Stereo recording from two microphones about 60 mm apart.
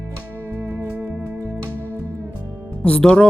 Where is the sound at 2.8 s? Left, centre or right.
Centre.